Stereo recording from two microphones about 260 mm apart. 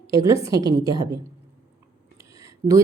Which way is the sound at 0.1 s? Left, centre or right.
Centre.